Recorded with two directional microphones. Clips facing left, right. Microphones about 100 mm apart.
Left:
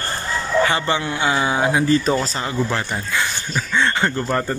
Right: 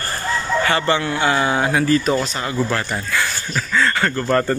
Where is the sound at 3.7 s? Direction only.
20° left (ahead or behind).